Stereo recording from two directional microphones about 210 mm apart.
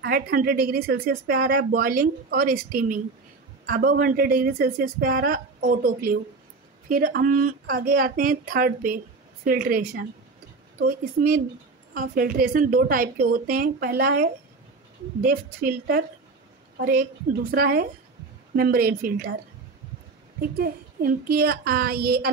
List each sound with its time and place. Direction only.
0.0 s speech: 45° right (ahead or behind)
17.5 s speech: 45° right (ahead or behind)
20.3 s speech: 45° right (ahead or behind)